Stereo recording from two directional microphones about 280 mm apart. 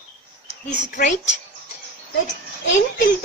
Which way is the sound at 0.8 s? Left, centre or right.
Left.